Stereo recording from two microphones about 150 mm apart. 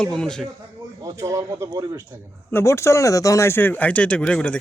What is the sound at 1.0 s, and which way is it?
Speech, 20° right (ahead or behind).